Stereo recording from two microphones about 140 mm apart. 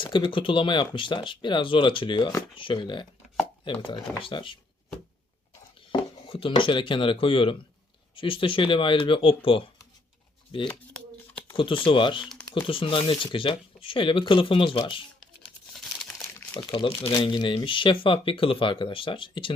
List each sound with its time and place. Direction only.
0.0 s speech: 35° left (ahead or behind)
5.9 s speech: 40° left (ahead or behind)
11.5 s speech: 35° left (ahead or behind)
15.7 s crumpling: centre (ahead or behind)
16.7 s speech: 40° left (ahead or behind)